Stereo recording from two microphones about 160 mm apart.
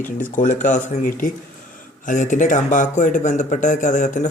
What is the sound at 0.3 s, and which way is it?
Speech, 50° left (ahead or behind).